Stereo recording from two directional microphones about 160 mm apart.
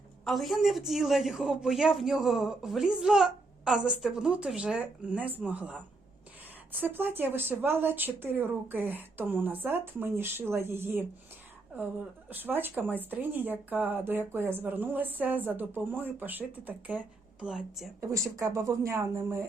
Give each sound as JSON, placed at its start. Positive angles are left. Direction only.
{"t": 0.3, "sound": "a woman's voice", "side_deg": 0}
{"t": 12.3, "sound": "a woman's voice", "side_deg": -10}
{"t": 18.1, "sound": "speech", "side_deg": -20}